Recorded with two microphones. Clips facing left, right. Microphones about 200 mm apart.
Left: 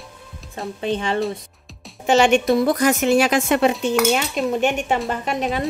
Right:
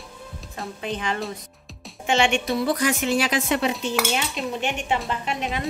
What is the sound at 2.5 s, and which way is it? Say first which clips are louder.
A woman's voice: left 6 dB; 45° left (ahead or behind).